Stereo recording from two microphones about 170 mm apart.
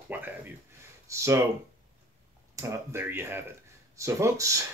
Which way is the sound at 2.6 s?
15° right (ahead or behind).